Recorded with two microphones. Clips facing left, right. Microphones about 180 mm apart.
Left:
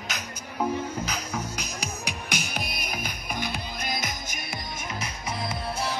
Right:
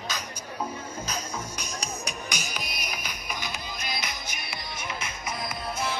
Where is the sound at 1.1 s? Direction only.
65° left (ahead or behind).